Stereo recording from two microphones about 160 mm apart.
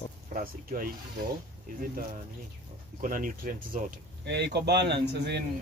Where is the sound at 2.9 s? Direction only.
60° right (ahead or behind).